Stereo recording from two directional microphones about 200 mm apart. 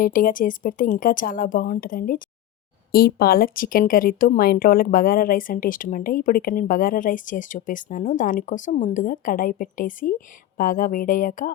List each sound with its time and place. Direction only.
0.0 s speech: 45° left (ahead or behind)